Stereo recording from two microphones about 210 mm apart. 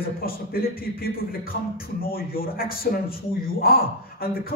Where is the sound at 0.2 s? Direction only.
45° left (ahead or behind).